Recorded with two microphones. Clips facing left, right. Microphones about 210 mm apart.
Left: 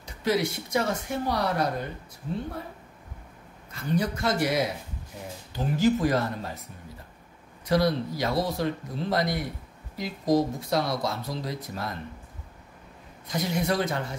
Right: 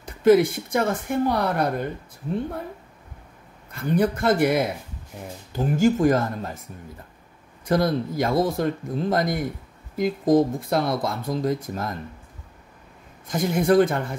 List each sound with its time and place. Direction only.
0.0 s speech: 50° right (ahead or behind)
3.7 s speech: 55° right (ahead or behind)
7.6 s speech: 50° right (ahead or behind)
13.3 s speech: 50° right (ahead or behind)